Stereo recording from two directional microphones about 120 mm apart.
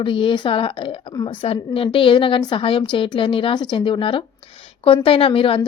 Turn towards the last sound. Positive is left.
turn(degrees=50)  # may be behind; listen again after turning